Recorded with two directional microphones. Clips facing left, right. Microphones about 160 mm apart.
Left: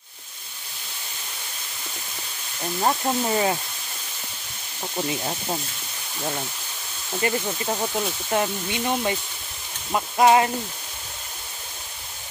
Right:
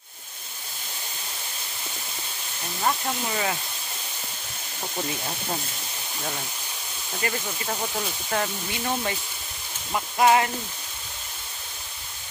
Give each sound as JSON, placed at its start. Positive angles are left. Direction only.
{"t": 2.8, "sound": "speech", "side_deg": 30}
{"t": 7.2, "sound": "speech", "side_deg": 25}